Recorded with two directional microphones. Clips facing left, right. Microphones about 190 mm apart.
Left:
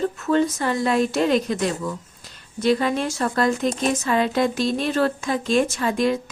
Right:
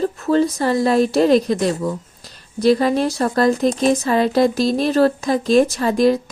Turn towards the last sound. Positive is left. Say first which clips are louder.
# right 6 dB
turn(degrees=-35)  # may be behind; listen again after turning